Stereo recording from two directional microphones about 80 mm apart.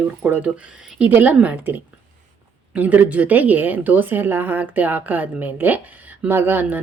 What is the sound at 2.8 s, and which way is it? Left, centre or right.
Speech, centre.